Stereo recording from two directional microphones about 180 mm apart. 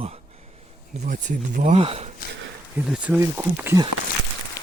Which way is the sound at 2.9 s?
5° right (ahead or behind).